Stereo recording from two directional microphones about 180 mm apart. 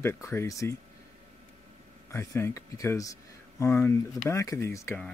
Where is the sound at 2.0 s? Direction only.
15° left (ahead or behind).